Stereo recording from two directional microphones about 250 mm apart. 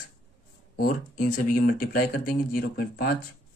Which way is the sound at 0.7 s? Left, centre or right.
Left.